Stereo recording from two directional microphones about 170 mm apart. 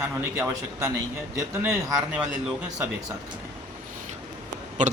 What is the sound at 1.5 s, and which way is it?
Speech, 15° right (ahead or behind).